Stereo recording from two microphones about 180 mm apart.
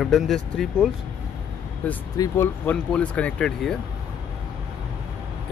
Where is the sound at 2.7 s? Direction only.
5° left (ahead or behind).